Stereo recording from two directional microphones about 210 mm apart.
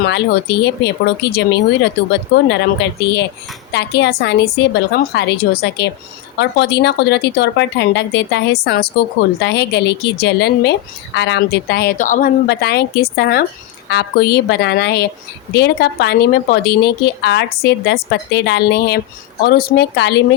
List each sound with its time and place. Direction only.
0.0 s a woman's voice: 55° left (ahead or behind)
3.7 s a woman's voice: 55° left (ahead or behind)